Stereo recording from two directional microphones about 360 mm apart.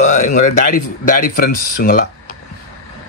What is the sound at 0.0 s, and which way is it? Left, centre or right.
Speech, left.